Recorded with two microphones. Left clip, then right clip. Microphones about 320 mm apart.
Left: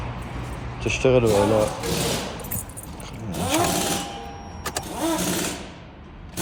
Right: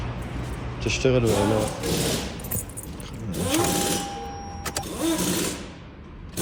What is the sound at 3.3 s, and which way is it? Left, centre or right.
Sewing machine, centre.